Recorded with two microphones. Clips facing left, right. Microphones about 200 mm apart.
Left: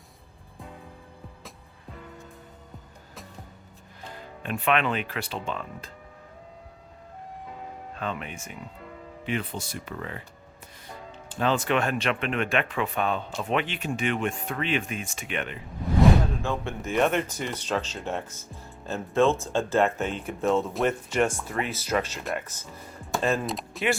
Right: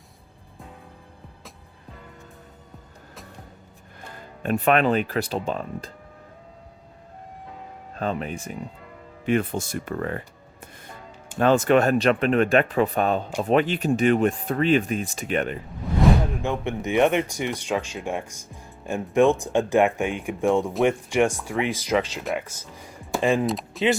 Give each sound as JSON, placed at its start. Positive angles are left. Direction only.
{"t": 4.4, "sound": "speech", "side_deg": -40}
{"t": 7.9, "sound": "speech", "side_deg": -40}
{"t": 9.2, "sound": "speech", "side_deg": -50}
{"t": 16.3, "sound": "speech", "side_deg": -15}
{"t": 23.5, "sound": "computer keyboard", "side_deg": 0}